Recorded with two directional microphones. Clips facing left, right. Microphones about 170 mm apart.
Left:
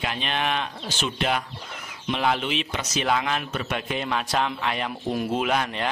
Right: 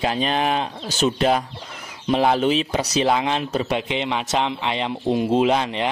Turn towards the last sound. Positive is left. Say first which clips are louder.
# right 6 dB
turn(degrees=-20)  # may be behind; listen again after turning